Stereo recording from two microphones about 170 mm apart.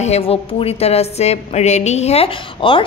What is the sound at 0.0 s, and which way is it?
A woman's voice, 35° left (ahead or behind).